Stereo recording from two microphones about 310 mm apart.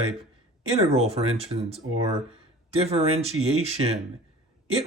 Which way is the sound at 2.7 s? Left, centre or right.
Centre.